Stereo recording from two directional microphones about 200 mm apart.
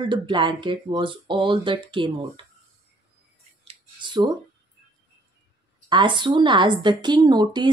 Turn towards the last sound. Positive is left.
turn(degrees=-20)  # may be behind; listen again after turning